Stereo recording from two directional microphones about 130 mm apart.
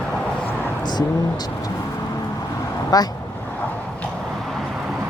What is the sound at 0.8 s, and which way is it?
Speech, 35° left (ahead or behind).